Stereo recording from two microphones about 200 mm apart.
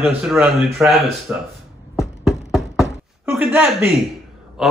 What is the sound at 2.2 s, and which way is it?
Knock, centre (ahead or behind).